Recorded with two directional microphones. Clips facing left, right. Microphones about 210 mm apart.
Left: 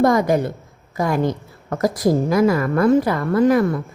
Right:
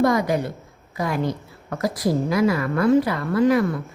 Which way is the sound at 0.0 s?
45° left (ahead or behind).